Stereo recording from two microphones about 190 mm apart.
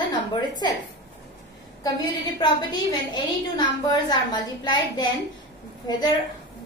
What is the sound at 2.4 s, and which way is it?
A woman's voice, 20° left (ahead or behind).